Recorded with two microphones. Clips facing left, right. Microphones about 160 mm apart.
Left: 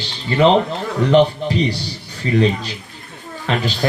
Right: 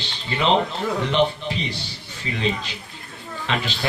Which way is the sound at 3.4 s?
40° left (ahead or behind).